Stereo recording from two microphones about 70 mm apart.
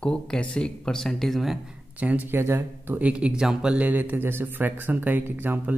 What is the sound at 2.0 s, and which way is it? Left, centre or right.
Speech, right.